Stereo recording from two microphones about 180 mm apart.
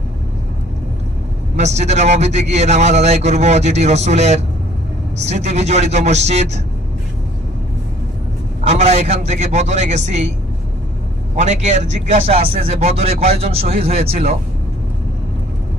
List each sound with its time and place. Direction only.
1.5 s speech: 40° right (ahead or behind)
8.6 s speech: 40° right (ahead or behind)
11.3 s speech: 40° right (ahead or behind)